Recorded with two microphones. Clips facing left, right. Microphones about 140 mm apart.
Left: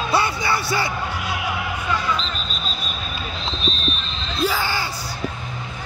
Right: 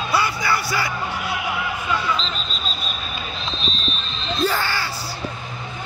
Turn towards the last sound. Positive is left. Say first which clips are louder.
# even
turn(degrees=10)  # may be behind; listen again after turning